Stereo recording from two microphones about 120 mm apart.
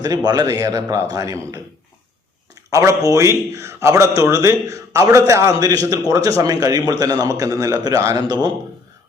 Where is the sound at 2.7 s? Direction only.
25° right (ahead or behind).